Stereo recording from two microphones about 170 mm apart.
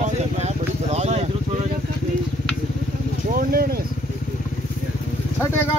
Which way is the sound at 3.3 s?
60° right (ahead or behind).